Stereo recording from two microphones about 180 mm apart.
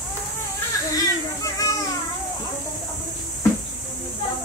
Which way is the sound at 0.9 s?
20° left (ahead or behind).